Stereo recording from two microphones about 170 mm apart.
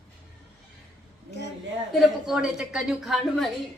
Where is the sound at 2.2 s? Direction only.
5° right (ahead or behind).